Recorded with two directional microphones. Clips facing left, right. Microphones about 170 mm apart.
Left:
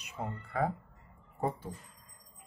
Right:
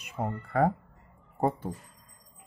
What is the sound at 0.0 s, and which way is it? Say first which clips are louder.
Speech: right 6 dB; 55° right (ahead or behind).